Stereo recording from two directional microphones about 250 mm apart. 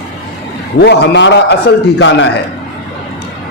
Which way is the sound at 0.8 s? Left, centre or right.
Left.